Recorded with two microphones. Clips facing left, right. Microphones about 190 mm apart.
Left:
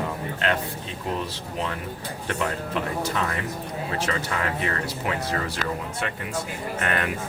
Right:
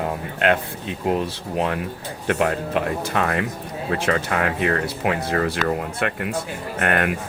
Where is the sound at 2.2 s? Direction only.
60° right (ahead or behind).